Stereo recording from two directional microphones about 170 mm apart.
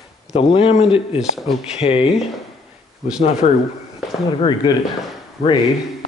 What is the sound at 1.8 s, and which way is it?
Speech, 35° left (ahead or behind).